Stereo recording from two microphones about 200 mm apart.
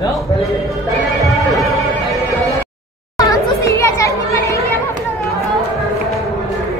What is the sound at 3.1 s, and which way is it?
Chatter, 15° left (ahead or behind).